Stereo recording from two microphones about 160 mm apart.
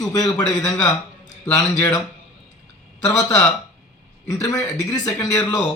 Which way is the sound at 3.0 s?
25° left (ahead or behind).